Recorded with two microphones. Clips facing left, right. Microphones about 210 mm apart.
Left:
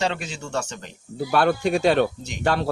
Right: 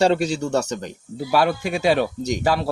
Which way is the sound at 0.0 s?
40° right (ahead or behind).